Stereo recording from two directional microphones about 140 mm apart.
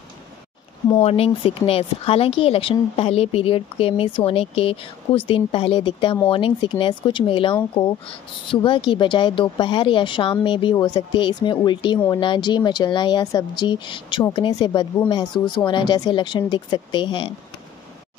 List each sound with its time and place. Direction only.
1.0 s speech: 45° left (ahead or behind)